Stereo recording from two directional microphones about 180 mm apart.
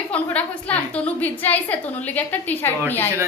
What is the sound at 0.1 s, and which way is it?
A woman's voice, 5° left (ahead or behind).